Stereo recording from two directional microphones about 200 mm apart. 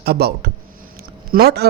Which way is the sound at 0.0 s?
55° right (ahead or behind).